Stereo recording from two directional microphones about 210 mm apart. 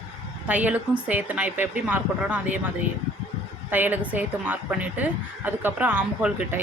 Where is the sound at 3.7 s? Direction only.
10° right (ahead or behind).